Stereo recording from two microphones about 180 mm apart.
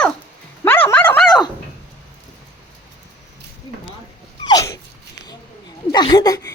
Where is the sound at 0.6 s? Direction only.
10° left (ahead or behind).